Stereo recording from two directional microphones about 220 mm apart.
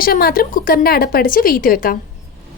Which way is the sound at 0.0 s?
40° left (ahead or behind).